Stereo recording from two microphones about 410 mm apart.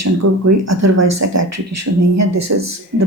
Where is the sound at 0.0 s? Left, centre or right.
Right.